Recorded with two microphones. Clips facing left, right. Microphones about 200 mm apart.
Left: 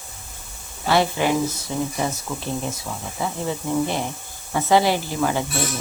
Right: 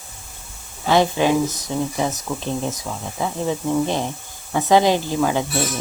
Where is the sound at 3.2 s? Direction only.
15° right (ahead or behind).